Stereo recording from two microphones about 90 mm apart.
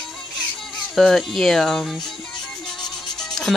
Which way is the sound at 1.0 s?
Centre (ahead or behind).